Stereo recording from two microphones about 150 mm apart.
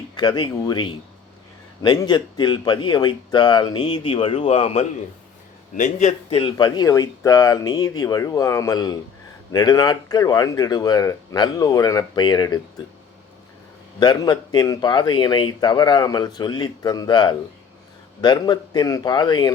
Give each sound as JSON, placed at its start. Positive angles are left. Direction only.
{"t": 0.2, "sound": "speech", "side_deg": 30}
{"t": 5.7, "sound": "a man's voice", "side_deg": 55}
{"t": 6.3, "sound": "speech", "side_deg": 30}
{"t": 14.0, "sound": "speech", "side_deg": 30}